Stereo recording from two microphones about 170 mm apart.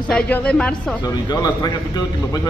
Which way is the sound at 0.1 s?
5° left (ahead or behind).